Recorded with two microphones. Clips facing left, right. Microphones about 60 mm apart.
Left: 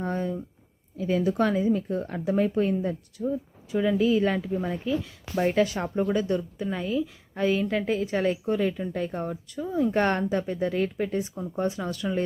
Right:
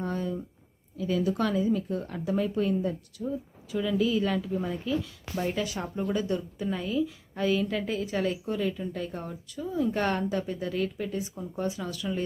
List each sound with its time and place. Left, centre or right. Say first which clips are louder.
0.0 s a sound: left 2 dB; left
0.9 s a woman's voice: left 3 dB; left
5.0 s a woman's voice: left 5 dB; left
6.7 s a woman's voice: even; centre; by 12.0 s left